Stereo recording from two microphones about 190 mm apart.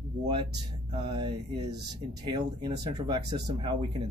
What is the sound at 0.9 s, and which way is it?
Speech, 25° right (ahead or behind).